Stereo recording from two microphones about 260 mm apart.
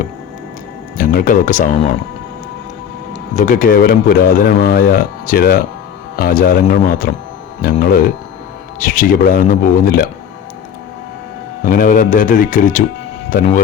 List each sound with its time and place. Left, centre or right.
0.9 s speech: left
3.3 s speech: left
11.6 s speech: left